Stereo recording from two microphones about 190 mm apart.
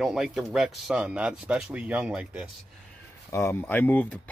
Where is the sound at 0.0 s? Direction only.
Centre (ahead or behind).